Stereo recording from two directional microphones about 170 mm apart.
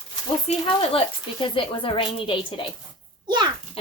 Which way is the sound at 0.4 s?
35° left (ahead or behind).